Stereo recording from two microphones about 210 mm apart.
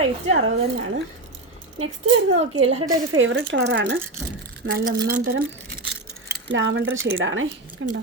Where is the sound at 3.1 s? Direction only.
70° right (ahead or behind).